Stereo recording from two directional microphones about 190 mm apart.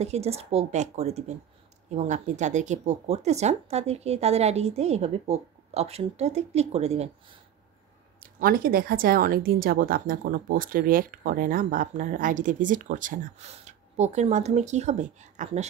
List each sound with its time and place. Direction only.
0.0 s speech: 35° right (ahead or behind)
8.2 s speech: 50° right (ahead or behind)